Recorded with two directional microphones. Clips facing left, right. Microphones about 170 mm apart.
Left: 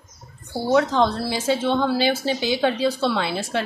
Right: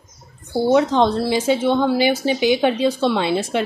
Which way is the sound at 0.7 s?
20° right (ahead or behind).